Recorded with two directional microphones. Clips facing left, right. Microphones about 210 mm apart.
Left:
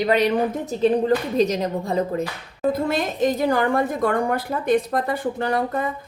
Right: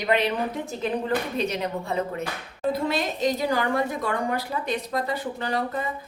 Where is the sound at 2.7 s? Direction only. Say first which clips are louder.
Left 3 dB; 50° left (ahead or behind).